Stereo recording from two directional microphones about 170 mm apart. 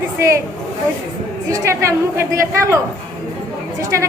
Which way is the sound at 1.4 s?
20° right (ahead or behind).